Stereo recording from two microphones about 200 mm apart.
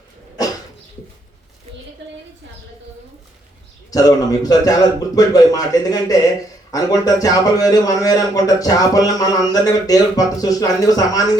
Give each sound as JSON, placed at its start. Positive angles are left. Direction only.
{"t": 3.9, "sound": "a man's voice", "side_deg": 20}